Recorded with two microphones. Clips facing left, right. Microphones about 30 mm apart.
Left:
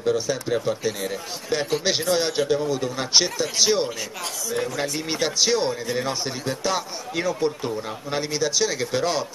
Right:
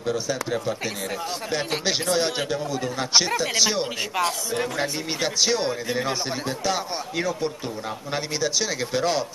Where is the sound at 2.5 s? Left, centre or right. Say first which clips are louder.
Left 4 dB; centre.